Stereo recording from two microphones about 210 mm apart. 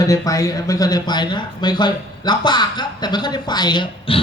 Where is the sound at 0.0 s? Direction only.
15° left (ahead or behind).